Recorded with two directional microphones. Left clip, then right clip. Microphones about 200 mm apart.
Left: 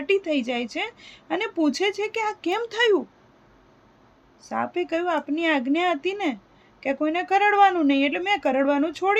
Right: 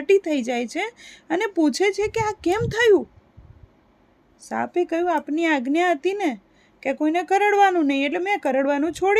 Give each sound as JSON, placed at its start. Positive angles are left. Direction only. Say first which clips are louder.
{"t": 0.0, "sound": "speech", "louder": "right 4 dB", "side_deg": -50}
{"t": 4.4, "sound": "speech", "louder": "right 3 dB", "side_deg": -50}